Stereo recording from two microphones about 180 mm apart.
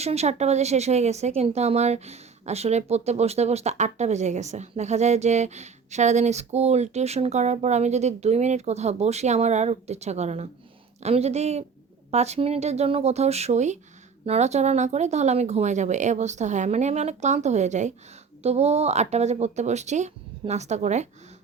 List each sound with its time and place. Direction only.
0.0 s speech: 35° right (ahead or behind)